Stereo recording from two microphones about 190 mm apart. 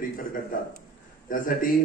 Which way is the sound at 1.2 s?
45° left (ahead or behind).